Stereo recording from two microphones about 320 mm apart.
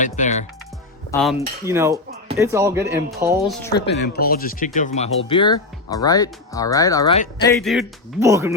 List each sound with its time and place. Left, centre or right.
0.0 s speech: left
1.1 s speech: centre
3.8 s speech: left; by 8.5 s centre